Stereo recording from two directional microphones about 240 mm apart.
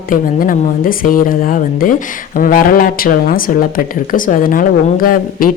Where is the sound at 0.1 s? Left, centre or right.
Left.